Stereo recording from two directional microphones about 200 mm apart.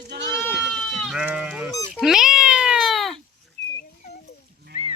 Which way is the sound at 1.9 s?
Centre (ahead or behind).